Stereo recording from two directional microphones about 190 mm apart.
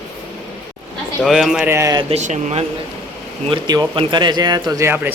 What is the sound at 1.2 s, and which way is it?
Speech, centre (ahead or behind).